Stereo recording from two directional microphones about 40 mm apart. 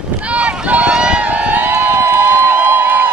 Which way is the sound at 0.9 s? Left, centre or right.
Right.